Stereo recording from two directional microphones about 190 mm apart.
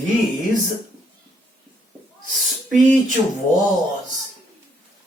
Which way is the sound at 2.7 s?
40° right (ahead or behind).